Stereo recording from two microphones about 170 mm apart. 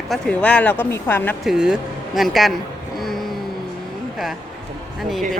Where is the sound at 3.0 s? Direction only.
Centre (ahead or behind).